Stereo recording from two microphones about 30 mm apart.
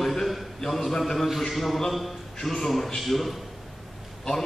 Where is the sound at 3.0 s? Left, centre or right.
Centre.